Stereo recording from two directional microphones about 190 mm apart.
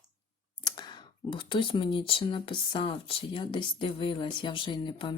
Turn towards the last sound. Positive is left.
turn(degrees=25)  # may be behind; listen again after turning